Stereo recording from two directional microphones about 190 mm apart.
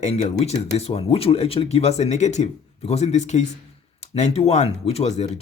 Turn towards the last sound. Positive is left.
turn(degrees=35)  # may be behind; listen again after turning